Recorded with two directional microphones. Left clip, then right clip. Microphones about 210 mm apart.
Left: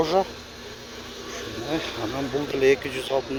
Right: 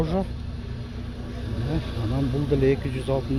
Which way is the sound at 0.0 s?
20° left (ahead or behind).